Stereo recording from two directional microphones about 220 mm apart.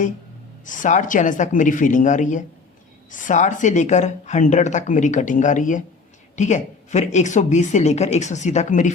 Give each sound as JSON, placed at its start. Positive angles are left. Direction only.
{"t": 0.6, "sound": "speech", "side_deg": 35}